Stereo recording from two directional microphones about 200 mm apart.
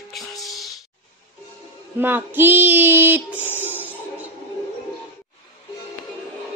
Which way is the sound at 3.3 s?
10° left (ahead or behind).